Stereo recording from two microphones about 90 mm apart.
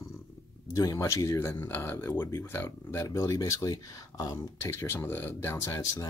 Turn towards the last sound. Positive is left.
turn(degrees=30)  # may be behind; listen again after turning